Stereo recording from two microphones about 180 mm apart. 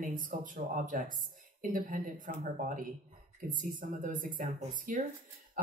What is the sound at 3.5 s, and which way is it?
Speech, 45° right (ahead or behind).